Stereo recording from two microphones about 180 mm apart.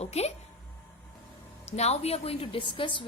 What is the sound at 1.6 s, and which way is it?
A woman's voice, 35° left (ahead or behind).